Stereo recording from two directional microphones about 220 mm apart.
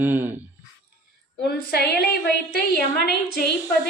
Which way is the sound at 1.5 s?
45° left (ahead or behind).